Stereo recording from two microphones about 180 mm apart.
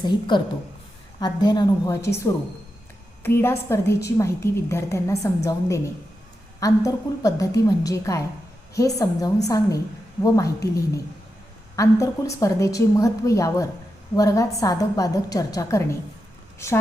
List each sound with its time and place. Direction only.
0.0 s a woman's voice: 25° left (ahead or behind)